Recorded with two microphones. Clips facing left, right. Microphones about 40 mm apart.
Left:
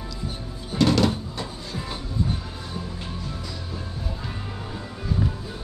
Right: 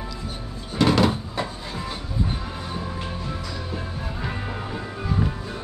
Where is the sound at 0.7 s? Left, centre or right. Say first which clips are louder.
Right 1 dB; centre.